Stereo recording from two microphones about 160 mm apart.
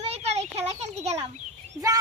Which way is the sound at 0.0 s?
40° right (ahead or behind).